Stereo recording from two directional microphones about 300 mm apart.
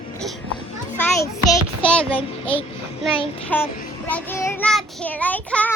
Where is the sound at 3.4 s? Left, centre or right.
Centre.